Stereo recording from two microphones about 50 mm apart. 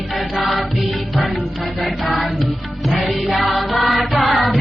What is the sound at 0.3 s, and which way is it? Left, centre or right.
Music, centre.